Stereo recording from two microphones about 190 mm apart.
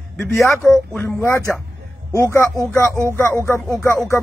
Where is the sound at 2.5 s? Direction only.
15° right (ahead or behind).